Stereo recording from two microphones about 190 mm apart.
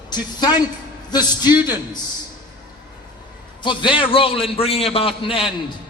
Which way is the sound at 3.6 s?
25° left (ahead or behind).